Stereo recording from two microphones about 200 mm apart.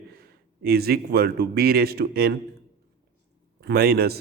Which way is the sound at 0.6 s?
50° right (ahead or behind).